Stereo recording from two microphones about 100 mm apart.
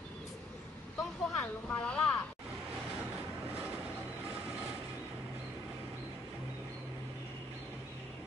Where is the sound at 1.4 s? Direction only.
10° left (ahead or behind).